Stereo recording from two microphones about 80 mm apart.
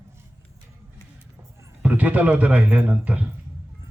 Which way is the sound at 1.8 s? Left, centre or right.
Centre.